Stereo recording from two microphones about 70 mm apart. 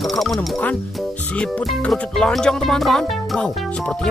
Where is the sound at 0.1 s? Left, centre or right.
Centre.